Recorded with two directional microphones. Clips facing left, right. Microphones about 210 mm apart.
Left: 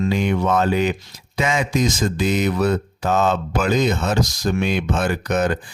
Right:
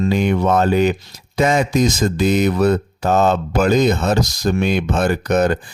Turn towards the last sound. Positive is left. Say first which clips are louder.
# right 4 dB
turn(degrees=-40)  # may be behind; listen again after turning